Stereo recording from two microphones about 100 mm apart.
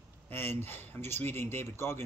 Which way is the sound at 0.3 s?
20° left (ahead or behind).